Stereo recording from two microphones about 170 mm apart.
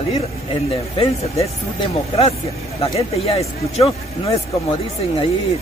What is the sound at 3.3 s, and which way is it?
Speech, 35° left (ahead or behind).